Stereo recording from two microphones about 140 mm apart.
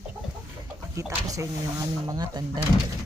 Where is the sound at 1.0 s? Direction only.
20° right (ahead or behind).